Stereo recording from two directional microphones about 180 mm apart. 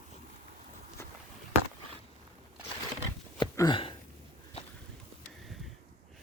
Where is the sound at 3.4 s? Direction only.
25° left (ahead or behind).